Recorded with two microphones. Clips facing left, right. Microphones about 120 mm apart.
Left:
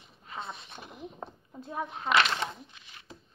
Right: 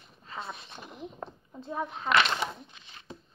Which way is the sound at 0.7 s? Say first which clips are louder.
Right 1 dB; 10° left (ahead or behind).